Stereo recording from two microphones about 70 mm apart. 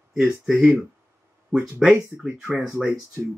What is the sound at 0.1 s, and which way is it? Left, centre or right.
Speech, centre.